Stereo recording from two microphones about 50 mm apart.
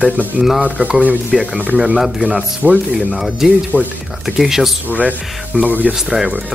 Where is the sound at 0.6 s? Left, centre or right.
Centre.